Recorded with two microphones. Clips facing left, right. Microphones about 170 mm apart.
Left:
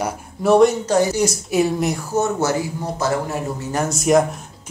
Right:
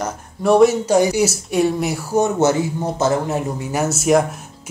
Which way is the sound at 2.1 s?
20° right (ahead or behind).